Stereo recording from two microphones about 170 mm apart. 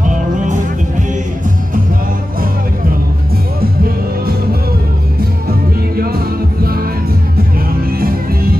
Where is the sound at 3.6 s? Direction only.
60° right (ahead or behind).